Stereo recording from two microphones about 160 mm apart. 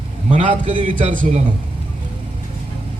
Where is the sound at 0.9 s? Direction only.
55° right (ahead or behind).